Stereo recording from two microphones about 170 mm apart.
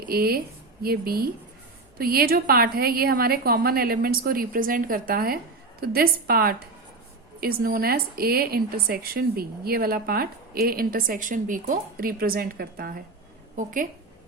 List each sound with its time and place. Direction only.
0.0 s a woman's voice: 65° right (ahead or behind)